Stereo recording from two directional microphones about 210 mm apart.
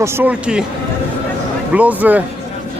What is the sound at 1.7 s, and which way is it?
Speech, 5° right (ahead or behind).